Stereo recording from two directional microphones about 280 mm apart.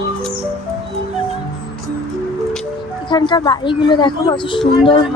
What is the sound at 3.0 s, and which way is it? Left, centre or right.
Speech, centre.